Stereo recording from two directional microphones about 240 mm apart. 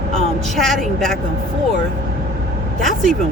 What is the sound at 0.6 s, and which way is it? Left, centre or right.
Speech, centre.